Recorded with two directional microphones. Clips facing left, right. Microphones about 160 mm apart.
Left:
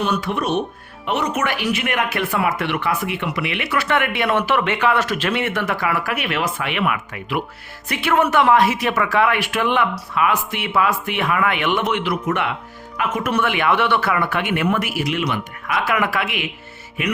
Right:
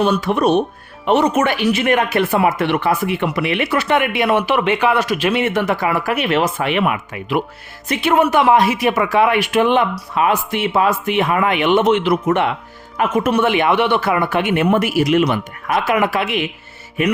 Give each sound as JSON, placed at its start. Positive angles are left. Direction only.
{"t": 0.0, "sound": "speech", "side_deg": -35}
{"t": 3.8, "sound": "speech", "side_deg": -20}
{"t": 15.8, "sound": "speech", "side_deg": -20}